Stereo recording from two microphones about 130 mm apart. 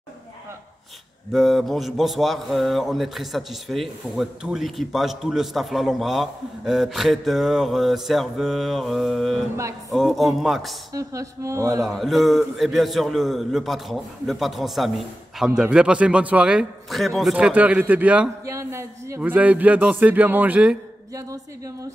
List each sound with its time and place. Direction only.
1.3 s speech: centre (ahead or behind)
10.9 s speech: 25° right (ahead or behind)
12.0 s speech: centre (ahead or behind)
18.4 s a man's voice: 25° right (ahead or behind)
21.1 s speech: 25° right (ahead or behind)